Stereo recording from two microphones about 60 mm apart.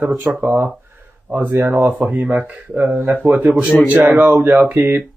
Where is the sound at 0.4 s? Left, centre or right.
Right.